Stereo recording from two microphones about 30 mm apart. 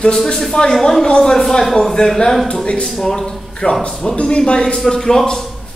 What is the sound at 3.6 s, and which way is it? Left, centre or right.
Speech, left.